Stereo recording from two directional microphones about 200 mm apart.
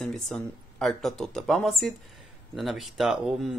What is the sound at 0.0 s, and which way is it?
Speech, centre (ahead or behind).